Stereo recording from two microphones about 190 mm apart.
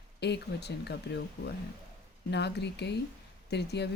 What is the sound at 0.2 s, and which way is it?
Speech, 60° left (ahead or behind).